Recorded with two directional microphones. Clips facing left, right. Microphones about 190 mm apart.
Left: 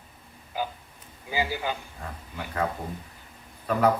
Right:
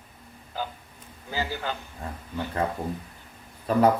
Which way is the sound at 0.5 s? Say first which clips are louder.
Left 2 dB; 10° left (ahead or behind).